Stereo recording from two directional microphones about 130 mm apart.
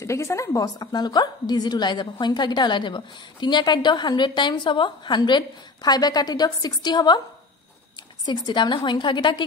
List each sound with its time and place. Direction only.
0.0 s a woman's voice: 20° left (ahead or behind)
8.3 s a woman's voice: 35° left (ahead or behind)